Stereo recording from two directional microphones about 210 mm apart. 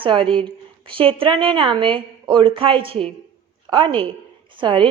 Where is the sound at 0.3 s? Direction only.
25° right (ahead or behind).